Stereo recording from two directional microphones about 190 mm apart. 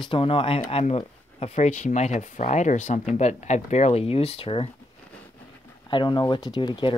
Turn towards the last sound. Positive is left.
turn(degrees=25)  # may be behind; listen again after turning